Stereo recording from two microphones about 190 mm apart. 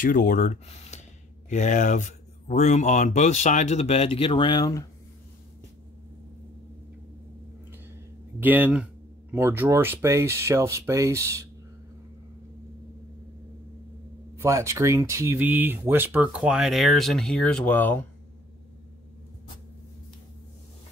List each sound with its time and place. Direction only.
0.0 s speech: 45° left (ahead or behind); by 4.8 s 20° left (ahead or behind)
8.4 s speech: 10° right (ahead or behind)
14.3 s speech: 15° right (ahead or behind); by 18.0 s 10° left (ahead or behind)